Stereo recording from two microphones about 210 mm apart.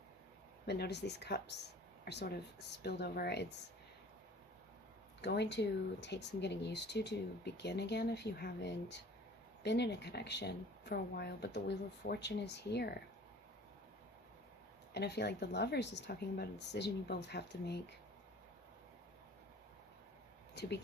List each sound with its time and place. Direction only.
0.7 s speech: 55° left (ahead or behind)
5.2 s speech: 55° left (ahead or behind)
14.9 s speech: 50° left (ahead or behind)
20.6 s speech: 50° left (ahead or behind)